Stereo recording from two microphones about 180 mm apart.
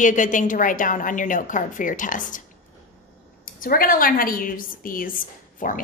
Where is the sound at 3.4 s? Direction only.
50° left (ahead or behind).